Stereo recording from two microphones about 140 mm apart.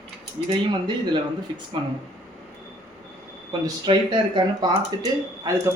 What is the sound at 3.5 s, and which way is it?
Speech, 35° right (ahead or behind).